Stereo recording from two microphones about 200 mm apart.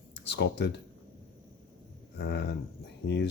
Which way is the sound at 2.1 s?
55° left (ahead or behind).